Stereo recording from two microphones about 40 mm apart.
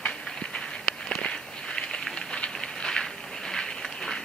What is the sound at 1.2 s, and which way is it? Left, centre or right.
Walk, left.